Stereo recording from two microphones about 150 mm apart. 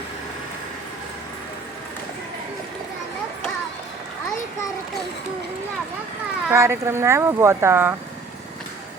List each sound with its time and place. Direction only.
6.5 s speech: 15° right (ahead or behind)